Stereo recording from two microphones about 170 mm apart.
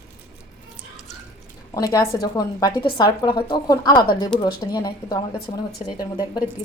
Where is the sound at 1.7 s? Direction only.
20° left (ahead or behind).